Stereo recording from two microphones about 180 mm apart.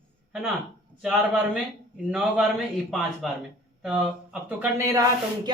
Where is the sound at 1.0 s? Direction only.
5° right (ahead or behind).